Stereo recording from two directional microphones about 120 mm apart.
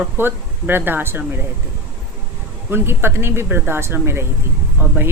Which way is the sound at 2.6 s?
20° right (ahead or behind).